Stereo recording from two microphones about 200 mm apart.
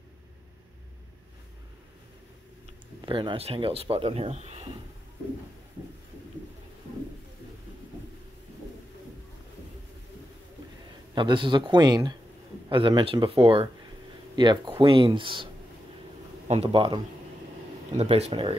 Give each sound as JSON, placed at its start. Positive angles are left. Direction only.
{"t": 3.0, "sound": "speech", "side_deg": -25}
{"t": 11.1, "sound": "speech", "side_deg": -25}